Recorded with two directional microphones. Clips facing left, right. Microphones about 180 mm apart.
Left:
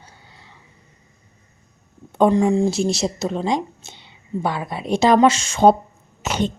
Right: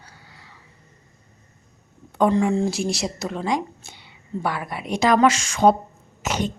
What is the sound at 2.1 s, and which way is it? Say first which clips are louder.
A woman's voice: left 3 dB; 25° left (ahead or behind).